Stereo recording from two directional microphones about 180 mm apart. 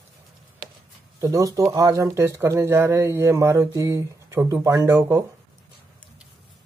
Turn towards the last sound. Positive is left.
turn(degrees=-15)  # may be behind; listen again after turning